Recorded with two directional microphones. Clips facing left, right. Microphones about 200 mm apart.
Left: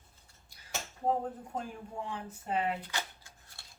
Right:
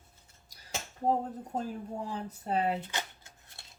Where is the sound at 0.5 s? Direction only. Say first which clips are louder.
Right 3 dB; 40° right (ahead or behind).